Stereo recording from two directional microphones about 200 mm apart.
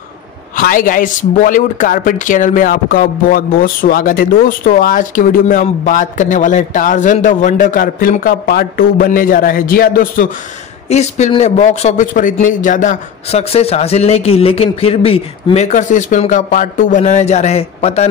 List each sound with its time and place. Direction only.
0.6 s speech: 45° left (ahead or behind)
10.9 s a man's voice: 35° left (ahead or behind)